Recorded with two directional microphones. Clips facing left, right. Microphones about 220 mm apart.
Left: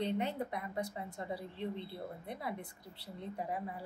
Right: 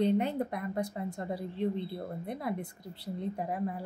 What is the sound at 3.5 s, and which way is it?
Speech, 50° right (ahead or behind).